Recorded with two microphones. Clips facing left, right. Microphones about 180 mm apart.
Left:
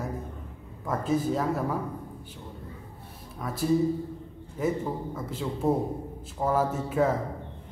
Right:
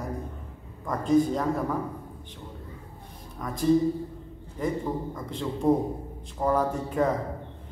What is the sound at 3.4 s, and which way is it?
Speech, 5° left (ahead or behind).